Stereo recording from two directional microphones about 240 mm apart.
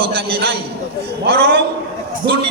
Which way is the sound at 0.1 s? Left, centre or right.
Right.